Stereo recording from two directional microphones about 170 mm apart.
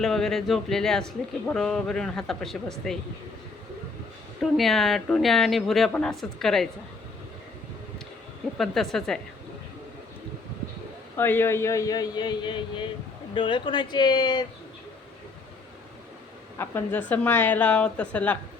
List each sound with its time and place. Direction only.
0.0 s speech: centre (ahead or behind)
4.5 s speech: centre (ahead or behind)
8.5 s speech: centre (ahead or behind)
11.2 s a man's voice: 15° left (ahead or behind)
16.6 s a woman's voice: 10° left (ahead or behind)